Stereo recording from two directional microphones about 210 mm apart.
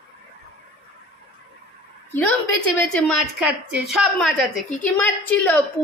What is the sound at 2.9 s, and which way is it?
A woman's voice, centre (ahead or behind).